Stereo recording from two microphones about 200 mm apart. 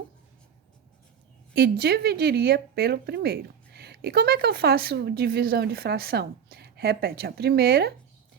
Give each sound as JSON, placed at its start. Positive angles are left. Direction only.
{"t": 1.5, "sound": "speech", "side_deg": -50}